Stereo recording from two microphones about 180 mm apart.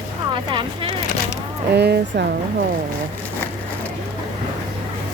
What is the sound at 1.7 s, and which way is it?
Speech, 65° right (ahead or behind).